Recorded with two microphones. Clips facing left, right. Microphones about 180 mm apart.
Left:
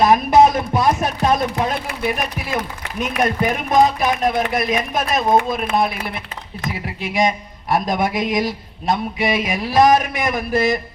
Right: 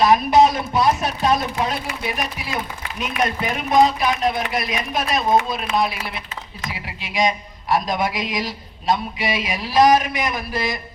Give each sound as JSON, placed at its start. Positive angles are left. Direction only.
{"t": 0.0, "sound": "speech", "side_deg": 50}